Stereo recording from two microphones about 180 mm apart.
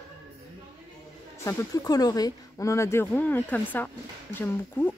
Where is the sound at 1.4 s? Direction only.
20° left (ahead or behind).